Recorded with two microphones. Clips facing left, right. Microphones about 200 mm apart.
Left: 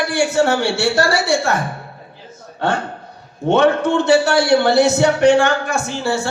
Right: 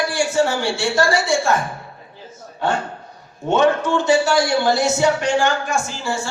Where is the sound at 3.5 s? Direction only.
60° left (ahead or behind).